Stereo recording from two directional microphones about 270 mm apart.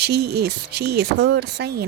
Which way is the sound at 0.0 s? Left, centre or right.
Right.